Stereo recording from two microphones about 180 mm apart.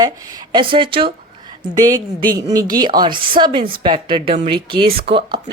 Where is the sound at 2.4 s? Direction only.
20° right (ahead or behind).